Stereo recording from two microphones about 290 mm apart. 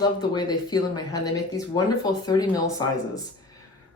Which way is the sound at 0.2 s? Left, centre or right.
Centre.